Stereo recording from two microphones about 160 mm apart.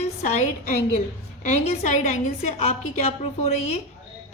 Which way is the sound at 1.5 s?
45° left (ahead or behind).